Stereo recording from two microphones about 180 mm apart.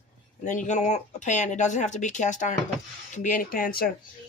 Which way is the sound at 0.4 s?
45° left (ahead or behind).